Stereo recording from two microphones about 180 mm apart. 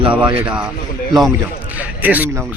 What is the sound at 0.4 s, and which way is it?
Speech, 5° right (ahead or behind).